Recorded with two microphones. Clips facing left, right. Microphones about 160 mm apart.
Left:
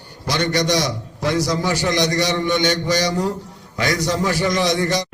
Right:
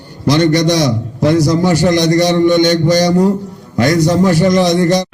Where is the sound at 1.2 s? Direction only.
55° right (ahead or behind).